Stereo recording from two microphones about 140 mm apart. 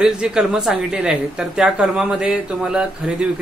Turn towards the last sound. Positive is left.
turn(degrees=-5)  # may be behind; listen again after turning